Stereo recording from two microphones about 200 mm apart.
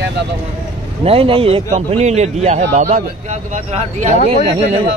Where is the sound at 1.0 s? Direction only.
30° right (ahead or behind).